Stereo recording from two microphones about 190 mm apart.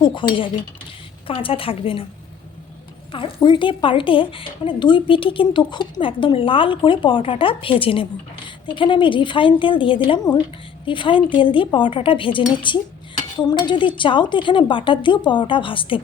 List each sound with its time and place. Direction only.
0.0 s cutlery: 25° left (ahead or behind)
1.3 s a woman's voice: 30° left (ahead or behind)
3.1 s a woman's voice: 30° left (ahead or behind)